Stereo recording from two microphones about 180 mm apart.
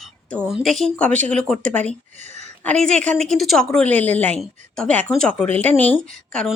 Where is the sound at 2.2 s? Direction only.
40° right (ahead or behind).